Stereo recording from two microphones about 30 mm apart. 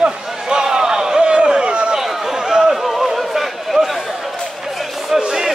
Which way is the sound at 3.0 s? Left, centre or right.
Centre.